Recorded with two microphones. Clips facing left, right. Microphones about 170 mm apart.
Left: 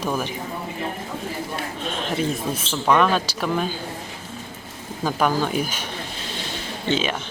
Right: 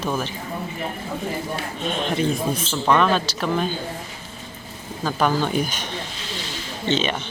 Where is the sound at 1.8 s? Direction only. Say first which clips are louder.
Right 3 dB; centre (ahead or behind).